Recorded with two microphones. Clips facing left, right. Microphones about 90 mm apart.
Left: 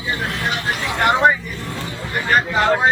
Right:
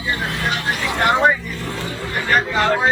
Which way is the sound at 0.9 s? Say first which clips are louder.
Left 1 dB; centre (ahead or behind).